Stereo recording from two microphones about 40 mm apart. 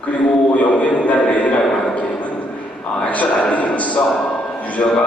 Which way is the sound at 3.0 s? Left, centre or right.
Left.